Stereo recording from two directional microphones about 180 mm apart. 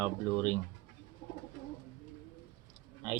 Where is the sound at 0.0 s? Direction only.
20° right (ahead or behind).